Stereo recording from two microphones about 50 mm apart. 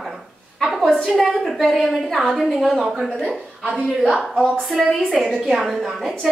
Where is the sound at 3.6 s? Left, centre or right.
Centre.